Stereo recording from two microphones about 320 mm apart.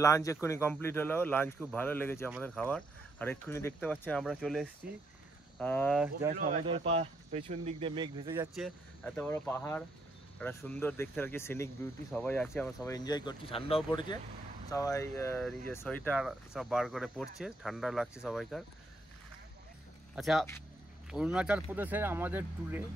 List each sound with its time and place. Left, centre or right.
0.0 s speech: centre
6.3 s speech: right; by 18.6 s centre
20.2 s speech: centre